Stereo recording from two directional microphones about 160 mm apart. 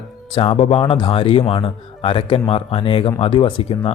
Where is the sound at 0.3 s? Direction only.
35° left (ahead or behind).